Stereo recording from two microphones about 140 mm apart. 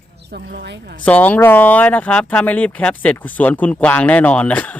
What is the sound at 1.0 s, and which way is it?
Speech, 10° left (ahead or behind).